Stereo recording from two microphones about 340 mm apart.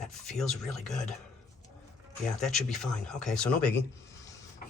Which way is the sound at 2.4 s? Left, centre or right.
Centre.